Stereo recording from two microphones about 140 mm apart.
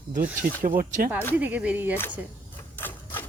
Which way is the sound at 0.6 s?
80° right.